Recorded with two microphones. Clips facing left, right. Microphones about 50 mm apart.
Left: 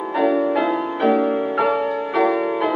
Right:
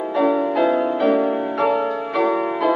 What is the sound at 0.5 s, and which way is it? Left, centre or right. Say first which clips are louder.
Music: right 2 dB; centre.